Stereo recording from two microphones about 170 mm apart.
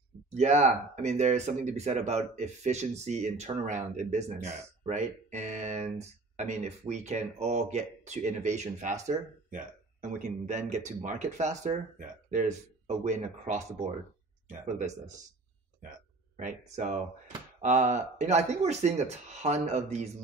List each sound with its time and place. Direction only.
0.3 s speech: 40° right (ahead or behind)
14.7 s speech: 45° right (ahead or behind)
16.3 s speech: 45° right (ahead or behind)